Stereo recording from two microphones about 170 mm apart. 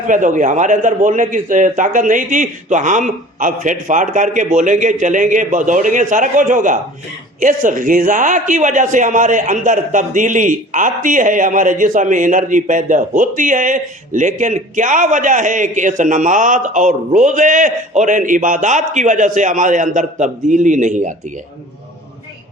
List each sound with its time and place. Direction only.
0.1 s a man's voice: 50° right (ahead or behind)